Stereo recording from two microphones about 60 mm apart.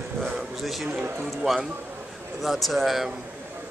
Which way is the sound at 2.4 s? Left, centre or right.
Centre.